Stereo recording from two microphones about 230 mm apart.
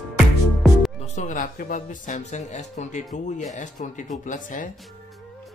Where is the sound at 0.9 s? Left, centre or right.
Left.